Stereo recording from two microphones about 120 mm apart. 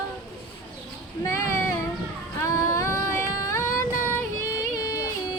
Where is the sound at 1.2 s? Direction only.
25° left (ahead or behind).